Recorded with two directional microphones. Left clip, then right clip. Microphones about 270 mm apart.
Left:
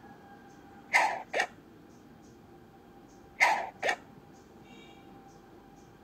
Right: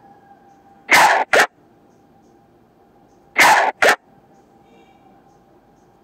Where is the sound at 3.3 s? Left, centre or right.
Right.